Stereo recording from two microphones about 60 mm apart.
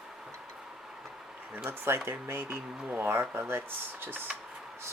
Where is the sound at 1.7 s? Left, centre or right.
Right.